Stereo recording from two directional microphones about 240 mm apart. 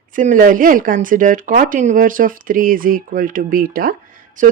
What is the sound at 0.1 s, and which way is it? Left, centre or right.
Speech, right.